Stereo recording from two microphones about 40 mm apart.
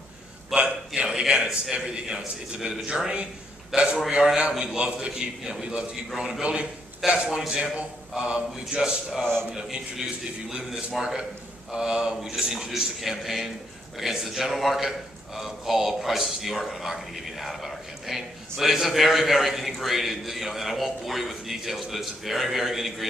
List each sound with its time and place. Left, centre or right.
0.5 s a sound: centre
0.9 s a man's voice: centre
7.0 s speech: centre
7.3 s a man's voice: centre
9.2 s a man's voice: centre
11.0 s a man's voice: centre